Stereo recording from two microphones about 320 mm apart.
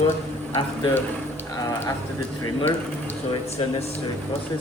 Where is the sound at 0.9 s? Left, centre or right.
Centre.